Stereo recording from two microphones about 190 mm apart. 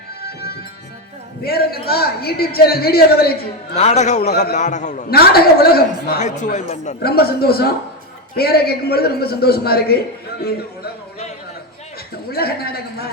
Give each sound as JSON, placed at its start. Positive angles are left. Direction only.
{"t": 1.4, "sound": "a man's voice", "side_deg": 55}
{"t": 3.8, "sound": "speech", "side_deg": 35}
{"t": 5.1, "sound": "a woman's voice", "side_deg": 55}
{"t": 6.1, "sound": "speech", "side_deg": 40}
{"t": 7.0, "sound": "a man's voice", "side_deg": 55}
{"t": 12.3, "sound": "a man's voice", "side_deg": 55}